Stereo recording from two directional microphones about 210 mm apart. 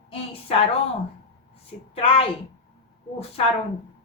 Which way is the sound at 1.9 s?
25° left (ahead or behind).